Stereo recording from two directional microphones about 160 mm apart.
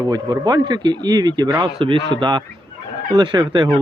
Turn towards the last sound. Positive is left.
turn(degrees=-25)  # may be behind; listen again after turning